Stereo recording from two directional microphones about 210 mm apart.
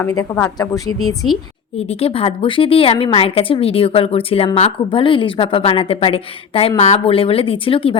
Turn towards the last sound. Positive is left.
turn(degrees=25)  # may be behind; listen again after turning